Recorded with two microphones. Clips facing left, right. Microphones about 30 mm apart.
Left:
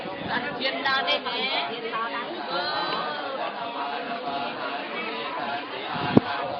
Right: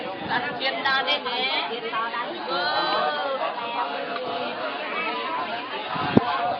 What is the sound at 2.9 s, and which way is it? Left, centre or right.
Crowd, centre.